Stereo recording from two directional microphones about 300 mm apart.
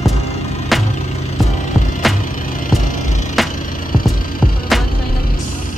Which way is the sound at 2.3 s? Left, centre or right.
Left.